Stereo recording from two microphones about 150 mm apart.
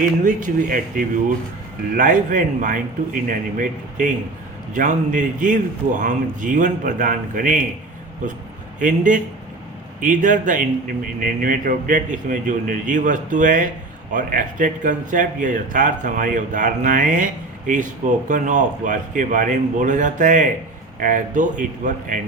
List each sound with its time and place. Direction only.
0.0 s speech: 60° right (ahead or behind)